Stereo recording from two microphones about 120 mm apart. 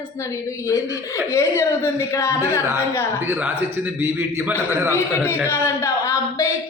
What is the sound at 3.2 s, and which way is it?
A man's voice, 15° right (ahead or behind).